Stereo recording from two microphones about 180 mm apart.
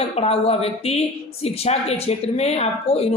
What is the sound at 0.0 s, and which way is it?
A woman's voice, 35° left (ahead or behind).